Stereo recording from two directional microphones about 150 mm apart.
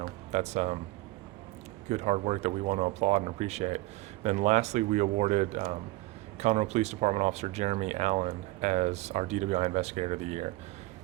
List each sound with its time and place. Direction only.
0.0 s music: 45° right (ahead or behind)
1.9 s speech: 50° right (ahead or behind)